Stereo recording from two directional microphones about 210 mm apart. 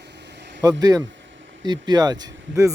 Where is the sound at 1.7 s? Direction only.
20° right (ahead or behind).